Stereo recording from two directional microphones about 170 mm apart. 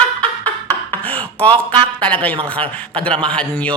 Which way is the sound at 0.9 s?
10° left (ahead or behind).